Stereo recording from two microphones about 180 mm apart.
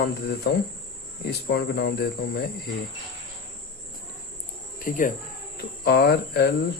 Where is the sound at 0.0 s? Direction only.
65° left (ahead or behind).